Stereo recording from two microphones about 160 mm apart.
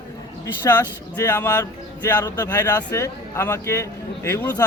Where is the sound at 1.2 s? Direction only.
15° left (ahead or behind).